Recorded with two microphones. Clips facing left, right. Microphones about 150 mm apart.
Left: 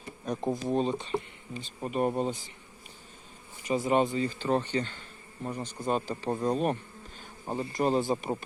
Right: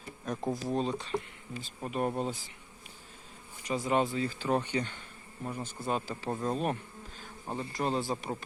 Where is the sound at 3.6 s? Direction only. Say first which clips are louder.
Left 3 dB; centre (ahead or behind).